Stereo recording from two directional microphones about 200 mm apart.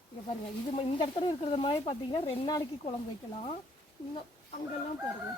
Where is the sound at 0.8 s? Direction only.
25° left (ahead or behind).